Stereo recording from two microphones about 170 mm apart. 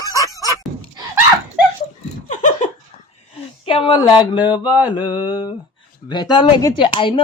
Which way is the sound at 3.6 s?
30° left (ahead or behind).